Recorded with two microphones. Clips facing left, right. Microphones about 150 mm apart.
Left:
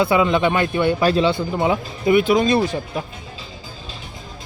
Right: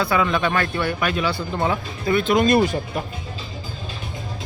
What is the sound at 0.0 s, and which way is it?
Speech, 20° left (ahead or behind).